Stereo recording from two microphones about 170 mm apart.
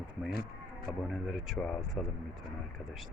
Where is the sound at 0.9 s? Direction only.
5° right (ahead or behind).